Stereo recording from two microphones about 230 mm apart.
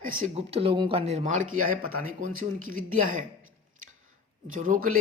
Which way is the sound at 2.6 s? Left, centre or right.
Right.